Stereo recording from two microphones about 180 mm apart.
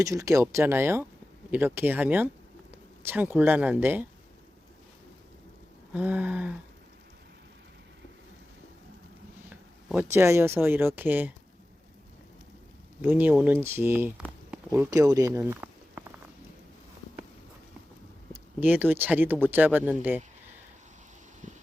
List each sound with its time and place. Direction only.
0.0 s speech: 20° right (ahead or behind)
5.9 s speech: 10° right (ahead or behind)
9.5 s speech: 15° right (ahead or behind)
13.0 s speech: 10° right (ahead or behind)
18.6 s speech: 10° right (ahead or behind)
21.4 s a sound: 45° right (ahead or behind)